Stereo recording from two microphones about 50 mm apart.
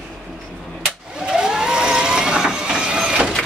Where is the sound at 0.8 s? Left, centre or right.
Centre.